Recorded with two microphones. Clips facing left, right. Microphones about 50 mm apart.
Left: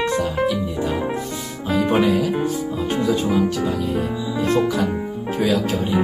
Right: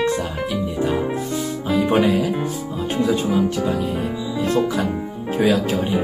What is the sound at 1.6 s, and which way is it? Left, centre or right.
Music, centre.